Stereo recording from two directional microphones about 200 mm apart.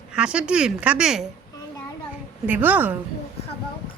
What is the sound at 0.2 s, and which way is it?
Speech, 5° right (ahead or behind).